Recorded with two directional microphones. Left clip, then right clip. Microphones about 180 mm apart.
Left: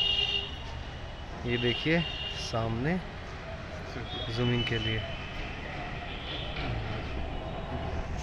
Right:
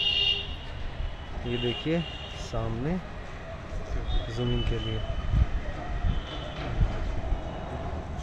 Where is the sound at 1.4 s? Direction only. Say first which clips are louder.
Left 1 dB; centre (ahead or behind).